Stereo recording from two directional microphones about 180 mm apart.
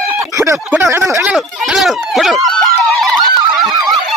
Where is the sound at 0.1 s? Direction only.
15° right (ahead or behind).